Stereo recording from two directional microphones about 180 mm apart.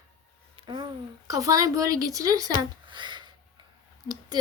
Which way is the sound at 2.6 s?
25° right (ahead or behind).